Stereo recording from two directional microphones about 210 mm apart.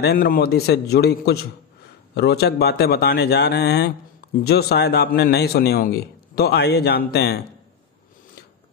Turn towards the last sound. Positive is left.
turn(degrees=50)  # may be behind; listen again after turning